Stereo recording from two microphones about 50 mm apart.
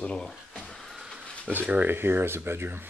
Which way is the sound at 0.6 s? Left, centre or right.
Centre.